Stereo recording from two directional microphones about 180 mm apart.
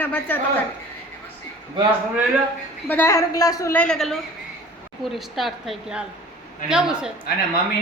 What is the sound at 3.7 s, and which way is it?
Music, 5° left (ahead or behind).